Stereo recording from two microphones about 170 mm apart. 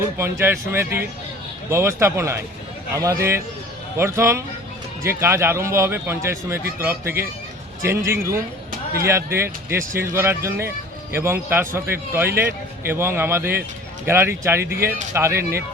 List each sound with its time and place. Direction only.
0.2 s a man's voice: 15° right (ahead or behind)